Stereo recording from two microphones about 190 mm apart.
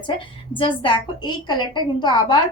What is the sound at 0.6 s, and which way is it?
A woman's voice, 25° left (ahead or behind).